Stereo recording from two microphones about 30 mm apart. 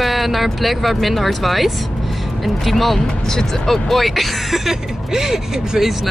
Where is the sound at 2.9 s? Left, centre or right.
Centre.